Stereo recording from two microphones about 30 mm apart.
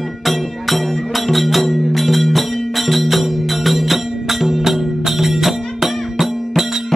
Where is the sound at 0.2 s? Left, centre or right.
Centre.